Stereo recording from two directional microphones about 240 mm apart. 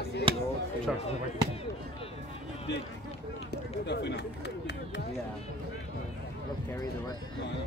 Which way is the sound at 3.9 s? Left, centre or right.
Left.